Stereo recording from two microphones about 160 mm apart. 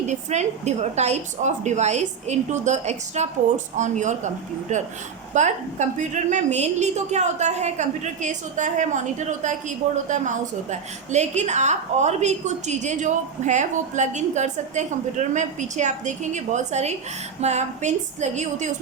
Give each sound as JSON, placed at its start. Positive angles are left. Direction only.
{"t": 0.1, "sound": "a woman's voice", "side_deg": -45}